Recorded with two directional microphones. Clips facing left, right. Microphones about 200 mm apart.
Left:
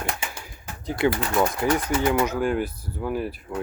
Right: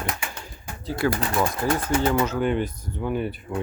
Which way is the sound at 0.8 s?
20° left (ahead or behind).